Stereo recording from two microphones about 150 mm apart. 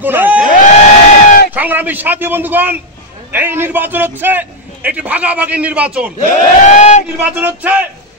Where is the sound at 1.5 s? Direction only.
10° right (ahead or behind).